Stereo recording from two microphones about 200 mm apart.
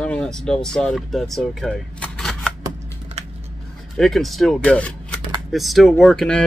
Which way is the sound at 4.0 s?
Centre (ahead or behind).